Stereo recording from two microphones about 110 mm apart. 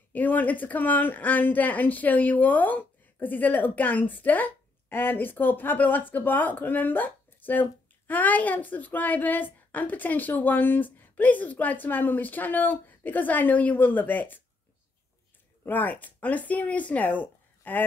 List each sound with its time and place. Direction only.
0.1 s a woman's voice: 15° left (ahead or behind)
15.6 s speech: 15° left (ahead or behind)